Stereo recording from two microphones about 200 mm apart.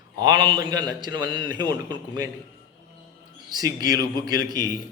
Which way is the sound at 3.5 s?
20° right (ahead or behind).